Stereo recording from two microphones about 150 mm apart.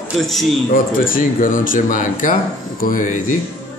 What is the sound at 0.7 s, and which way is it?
Speech, 65° left (ahead or behind).